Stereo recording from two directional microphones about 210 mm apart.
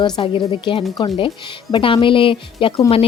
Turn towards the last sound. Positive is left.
turn(degrees=25)  # may be behind; listen again after turning